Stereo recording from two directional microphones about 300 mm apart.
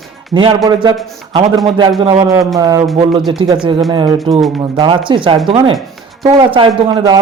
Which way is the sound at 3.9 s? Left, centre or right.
Centre.